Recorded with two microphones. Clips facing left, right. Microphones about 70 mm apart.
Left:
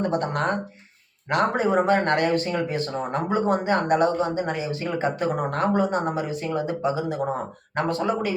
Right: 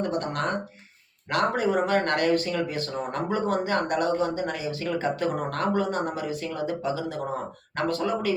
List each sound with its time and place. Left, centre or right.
0.0 s speech: left